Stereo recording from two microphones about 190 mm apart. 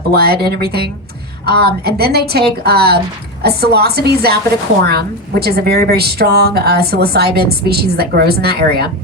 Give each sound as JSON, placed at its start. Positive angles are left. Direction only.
{"t": 0.1, "sound": "a woman's voice", "side_deg": -55}